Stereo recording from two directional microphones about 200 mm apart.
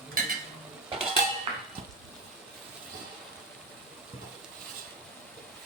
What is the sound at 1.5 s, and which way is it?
Hammer, 30° right (ahead or behind).